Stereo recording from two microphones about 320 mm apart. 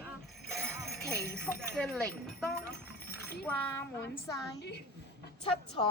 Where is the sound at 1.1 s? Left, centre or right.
Left.